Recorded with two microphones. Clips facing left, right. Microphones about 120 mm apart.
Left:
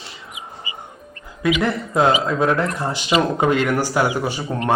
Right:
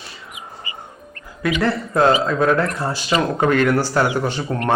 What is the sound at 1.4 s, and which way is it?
Speech, 15° left (ahead or behind).